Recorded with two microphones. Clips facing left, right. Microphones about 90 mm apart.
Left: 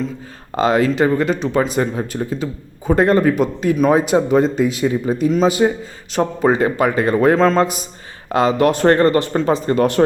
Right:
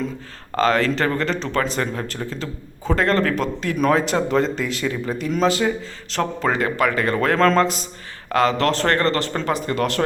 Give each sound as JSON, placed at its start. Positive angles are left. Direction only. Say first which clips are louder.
{"t": 0.5, "sound": "speech", "louder": "left 3 dB", "side_deg": 15}
{"t": 7.3, "sound": "a man's voice", "louder": "left 2 dB", "side_deg": 5}
{"t": 7.6, "sound": "speech", "louder": "left 2 dB", "side_deg": 15}